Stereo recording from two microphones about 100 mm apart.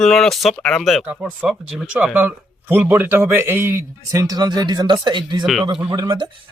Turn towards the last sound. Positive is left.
turn(degrees=-45)  # may be behind; listen again after turning